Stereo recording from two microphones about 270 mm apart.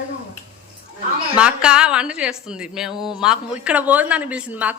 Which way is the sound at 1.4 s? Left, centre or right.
Centre.